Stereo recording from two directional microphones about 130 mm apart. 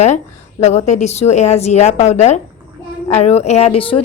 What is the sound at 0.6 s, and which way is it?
Speech, 60° left (ahead or behind).